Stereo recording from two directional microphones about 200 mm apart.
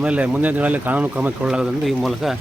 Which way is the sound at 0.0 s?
5° right (ahead or behind).